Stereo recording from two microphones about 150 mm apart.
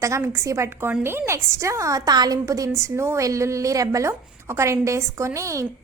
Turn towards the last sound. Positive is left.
turn(degrees=-20)  # may be behind; listen again after turning